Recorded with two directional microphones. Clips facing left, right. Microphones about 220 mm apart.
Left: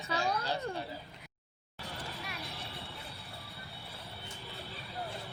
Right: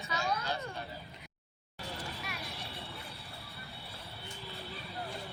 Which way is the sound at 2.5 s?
15° right (ahead or behind).